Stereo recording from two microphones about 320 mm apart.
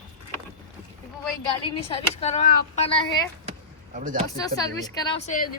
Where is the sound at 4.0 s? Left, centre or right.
Right.